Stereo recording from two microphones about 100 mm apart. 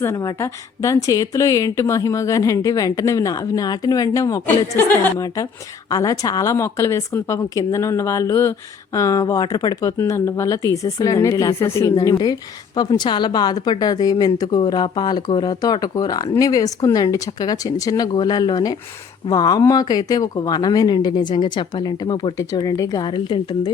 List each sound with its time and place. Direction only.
0.2 s a woman's voice: 35° left (ahead or behind)
10.0 s a woman's voice: 30° left (ahead or behind); by 23.7 s 55° left (ahead or behind)